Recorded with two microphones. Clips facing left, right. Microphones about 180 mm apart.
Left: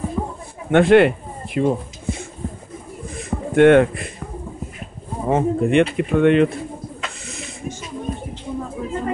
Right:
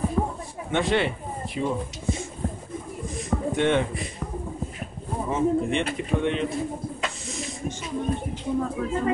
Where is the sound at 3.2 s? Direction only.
60° left (ahead or behind).